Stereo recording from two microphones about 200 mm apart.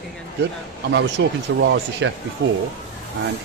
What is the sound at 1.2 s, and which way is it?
Speech, 65° right (ahead or behind).